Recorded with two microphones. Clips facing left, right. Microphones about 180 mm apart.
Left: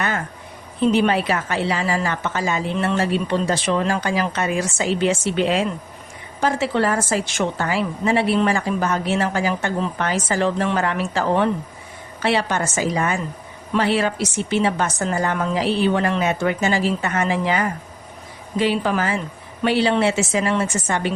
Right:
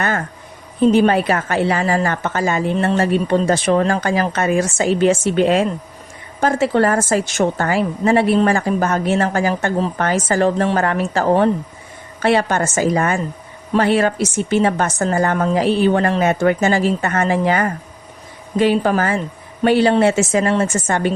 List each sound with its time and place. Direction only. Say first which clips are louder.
0.8 s a woman's voice: right 4 dB; 45° right (ahead or behind)